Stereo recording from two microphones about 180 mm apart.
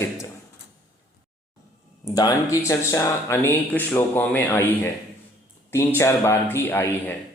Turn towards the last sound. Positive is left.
turn(degrees=10)  # may be behind; listen again after turning